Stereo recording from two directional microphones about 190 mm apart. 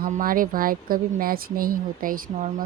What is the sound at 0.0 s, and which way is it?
A woman's voice, 50° right (ahead or behind).